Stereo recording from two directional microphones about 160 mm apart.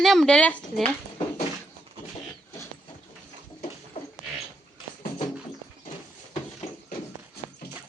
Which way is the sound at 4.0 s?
40° left (ahead or behind).